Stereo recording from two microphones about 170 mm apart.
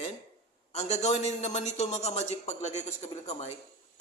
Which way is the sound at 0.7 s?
40° left (ahead or behind).